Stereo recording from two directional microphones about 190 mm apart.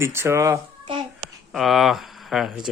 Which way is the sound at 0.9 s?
25° right (ahead or behind).